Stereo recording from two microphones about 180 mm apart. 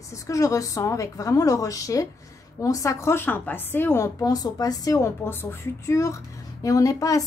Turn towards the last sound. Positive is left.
turn(degrees=20)  # may be behind; listen again after turning